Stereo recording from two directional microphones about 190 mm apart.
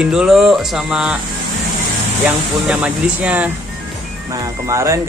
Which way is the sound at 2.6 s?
5° right (ahead or behind).